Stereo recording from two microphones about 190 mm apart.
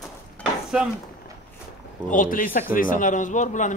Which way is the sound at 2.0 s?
45° left (ahead or behind).